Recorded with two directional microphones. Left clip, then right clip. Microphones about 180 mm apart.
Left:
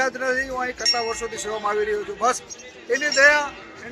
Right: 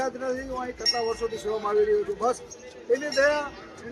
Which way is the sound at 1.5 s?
Centre (ahead or behind).